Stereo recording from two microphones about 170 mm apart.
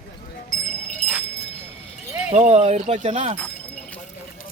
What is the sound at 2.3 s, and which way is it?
Speech, 40° right (ahead or behind).